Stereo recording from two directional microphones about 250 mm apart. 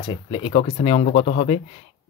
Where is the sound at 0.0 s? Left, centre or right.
Centre.